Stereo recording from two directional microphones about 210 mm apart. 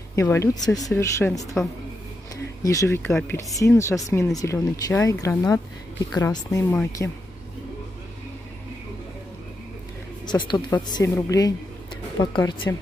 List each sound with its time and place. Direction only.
0.1 s speech: 15° left (ahead or behind)
2.6 s speech: 15° left (ahead or behind)
10.2 s speech: 20° left (ahead or behind)